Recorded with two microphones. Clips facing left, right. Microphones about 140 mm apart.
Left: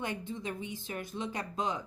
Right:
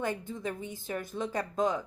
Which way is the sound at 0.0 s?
45° right (ahead or behind).